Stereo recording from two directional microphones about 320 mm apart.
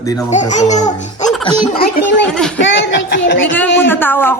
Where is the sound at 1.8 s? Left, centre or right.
Left.